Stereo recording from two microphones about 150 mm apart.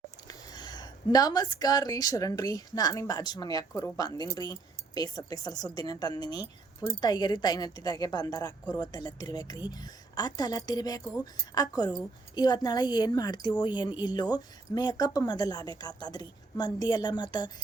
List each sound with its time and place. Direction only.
0.3 s speech: 25° left (ahead or behind)